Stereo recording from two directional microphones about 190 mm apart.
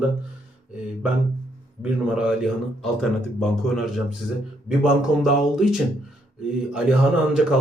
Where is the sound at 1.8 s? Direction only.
5° right (ahead or behind).